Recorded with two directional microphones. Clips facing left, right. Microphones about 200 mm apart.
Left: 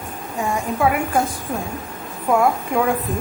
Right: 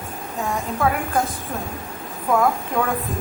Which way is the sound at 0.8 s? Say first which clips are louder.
Left 2 dB; 10° left (ahead or behind).